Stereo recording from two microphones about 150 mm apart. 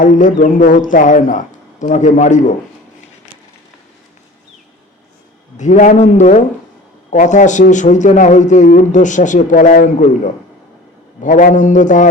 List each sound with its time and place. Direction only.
0.0 s speech: 60° left (ahead or behind)
5.5 s speech: 55° left (ahead or behind)
11.2 s speech: 60° left (ahead or behind)